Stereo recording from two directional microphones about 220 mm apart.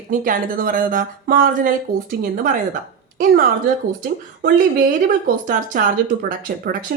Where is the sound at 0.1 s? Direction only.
40° right (ahead or behind).